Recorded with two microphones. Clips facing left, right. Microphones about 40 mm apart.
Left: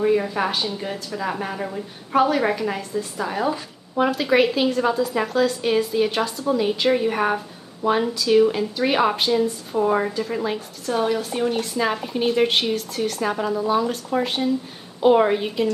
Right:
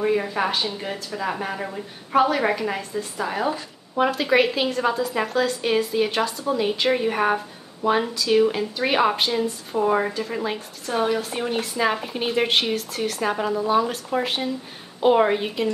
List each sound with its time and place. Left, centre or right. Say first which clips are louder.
0.0 s a woman's voice: left 2 dB; centre